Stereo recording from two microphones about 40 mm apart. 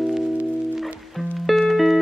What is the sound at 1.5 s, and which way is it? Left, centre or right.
Music, centre.